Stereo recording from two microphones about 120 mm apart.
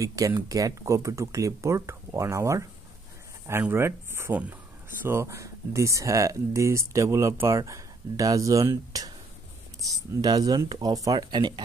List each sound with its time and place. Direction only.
0.0 s speech: 25° right (ahead or behind)
10.2 s speech: 35° right (ahead or behind)